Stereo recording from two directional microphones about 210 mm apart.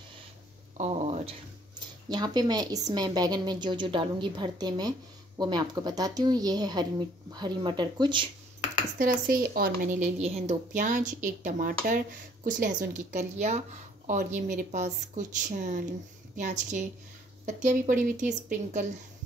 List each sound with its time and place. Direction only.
0.7 s a sound: 30° right (ahead or behind)
2.0 s speech: 20° right (ahead or behind)
8.9 s speech: 45° right (ahead or behind)